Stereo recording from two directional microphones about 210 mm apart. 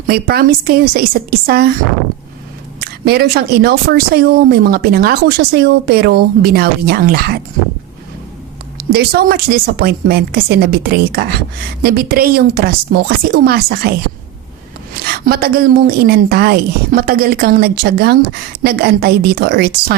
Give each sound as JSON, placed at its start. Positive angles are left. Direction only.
{"t": 0.1, "sound": "speech", "side_deg": -45}
{"t": 2.8, "sound": "speech", "side_deg": -50}
{"t": 8.8, "sound": "speech", "side_deg": -50}
{"t": 14.9, "sound": "speech", "side_deg": -45}